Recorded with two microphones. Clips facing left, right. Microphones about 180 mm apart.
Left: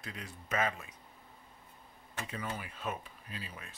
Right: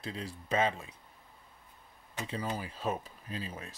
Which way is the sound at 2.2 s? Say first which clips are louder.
Right 5 dB; 30° right (ahead or behind).